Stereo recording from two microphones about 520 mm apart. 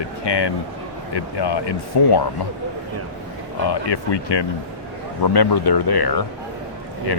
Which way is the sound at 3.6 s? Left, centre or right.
Left.